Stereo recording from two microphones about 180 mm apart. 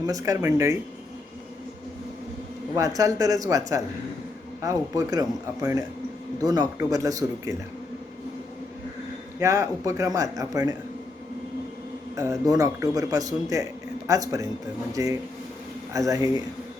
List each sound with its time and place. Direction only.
0.0 s speech: 20° right (ahead or behind)
2.7 s speech: 20° right (ahead or behind)
4.6 s speech: 20° right (ahead or behind)
6.4 s speech: 20° right (ahead or behind)
9.4 s speech: 15° right (ahead or behind)
12.1 s speech: 15° right (ahead or behind)